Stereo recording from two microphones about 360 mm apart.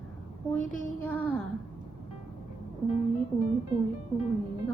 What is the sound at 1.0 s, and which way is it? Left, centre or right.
Speech, centre.